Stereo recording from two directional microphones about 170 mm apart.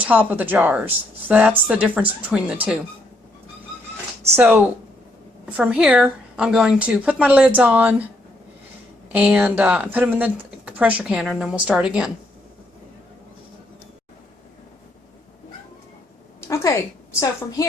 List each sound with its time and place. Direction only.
0.0 s speech: 10° right (ahead or behind)
4.4 s speech: 15° right (ahead or behind)
9.1 s speech: 5° right (ahead or behind)
16.4 s a sound: 15° left (ahead or behind)